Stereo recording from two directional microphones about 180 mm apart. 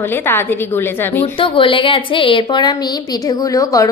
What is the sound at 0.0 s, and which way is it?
A woman's voice, 10° left (ahead or behind).